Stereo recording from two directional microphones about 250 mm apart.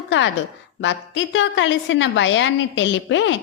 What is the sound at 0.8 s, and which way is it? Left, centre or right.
A woman's voice, left.